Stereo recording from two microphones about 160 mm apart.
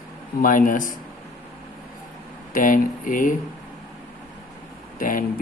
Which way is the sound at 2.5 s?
60° left (ahead or behind).